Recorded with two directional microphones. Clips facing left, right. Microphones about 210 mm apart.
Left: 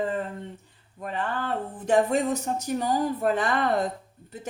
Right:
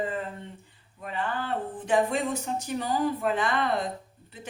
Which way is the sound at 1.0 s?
45° left (ahead or behind).